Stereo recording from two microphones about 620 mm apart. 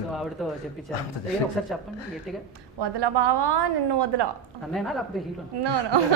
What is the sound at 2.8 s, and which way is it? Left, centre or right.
A woman's voice, right.